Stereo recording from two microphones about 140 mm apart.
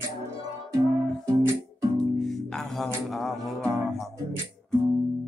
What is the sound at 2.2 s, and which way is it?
Music, centre (ahead or behind).